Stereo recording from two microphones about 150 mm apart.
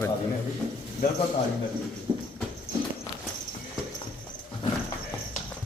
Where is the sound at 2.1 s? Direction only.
30° right (ahead or behind).